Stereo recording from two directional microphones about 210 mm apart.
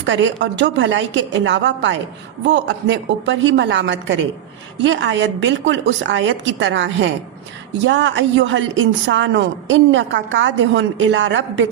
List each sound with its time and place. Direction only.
0.0 s a woman's voice: 60° right (ahead or behind)